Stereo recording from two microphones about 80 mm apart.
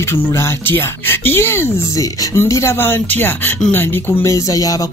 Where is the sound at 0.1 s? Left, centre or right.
Left.